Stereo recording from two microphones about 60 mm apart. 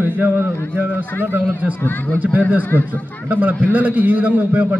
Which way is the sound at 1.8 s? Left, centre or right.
Left.